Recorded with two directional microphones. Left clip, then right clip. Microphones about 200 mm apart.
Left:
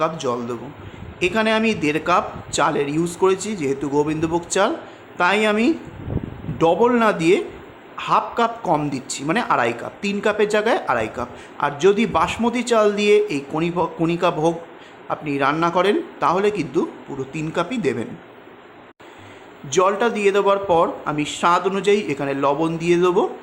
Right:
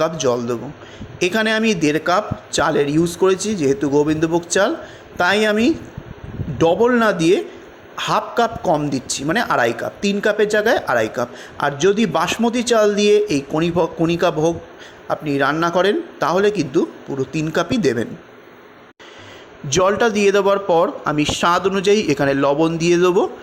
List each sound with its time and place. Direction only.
0.0 s a man's voice: 20° right (ahead or behind)
19.7 s speech: 25° right (ahead or behind)